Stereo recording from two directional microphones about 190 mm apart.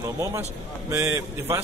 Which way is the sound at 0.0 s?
15° right (ahead or behind).